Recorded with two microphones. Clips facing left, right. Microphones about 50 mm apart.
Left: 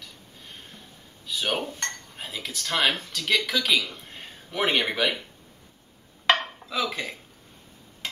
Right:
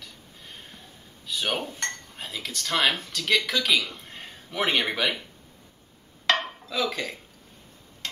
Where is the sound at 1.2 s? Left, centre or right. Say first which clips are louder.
Left 1 dB; centre.